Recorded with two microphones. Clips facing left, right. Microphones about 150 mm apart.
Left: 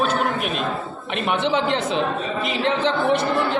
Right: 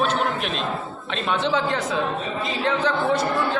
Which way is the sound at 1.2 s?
20° left (ahead or behind).